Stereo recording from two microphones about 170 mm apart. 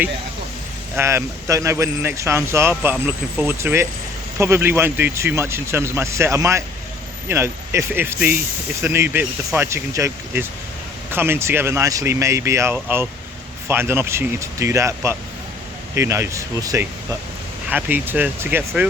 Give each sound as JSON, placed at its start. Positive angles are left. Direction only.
{"t": 0.9, "sound": "speech", "side_deg": -15}